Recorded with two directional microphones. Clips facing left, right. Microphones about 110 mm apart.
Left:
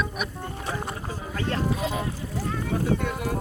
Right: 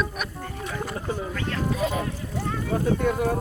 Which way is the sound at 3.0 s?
45° right (ahead or behind).